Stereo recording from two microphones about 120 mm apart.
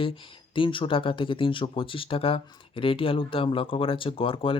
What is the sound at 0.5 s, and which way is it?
Speech, 45° left (ahead or behind).